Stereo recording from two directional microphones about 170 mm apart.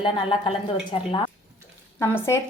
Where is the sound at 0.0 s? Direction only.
30° left (ahead or behind).